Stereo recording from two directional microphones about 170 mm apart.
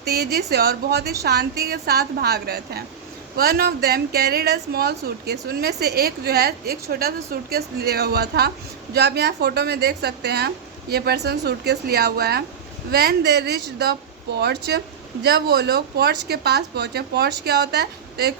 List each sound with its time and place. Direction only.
0.0 s a woman's voice: 70° right (ahead or behind)